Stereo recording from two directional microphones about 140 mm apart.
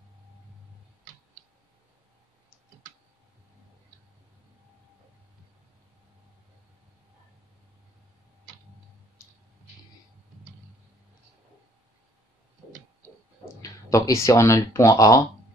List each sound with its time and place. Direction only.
13.6 s speech: 25° left (ahead or behind)